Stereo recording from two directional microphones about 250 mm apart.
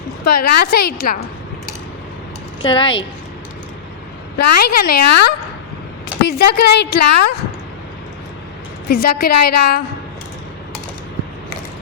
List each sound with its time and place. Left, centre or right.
0.3 s a woman's voice: left
2.6 s speech: centre
4.4 s a woman's voice: left
8.9 s a woman's voice: left